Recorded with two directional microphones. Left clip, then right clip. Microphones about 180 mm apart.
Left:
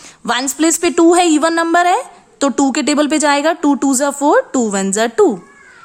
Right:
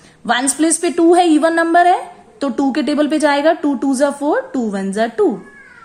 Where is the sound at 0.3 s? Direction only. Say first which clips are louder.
Even; 30° left (ahead or behind).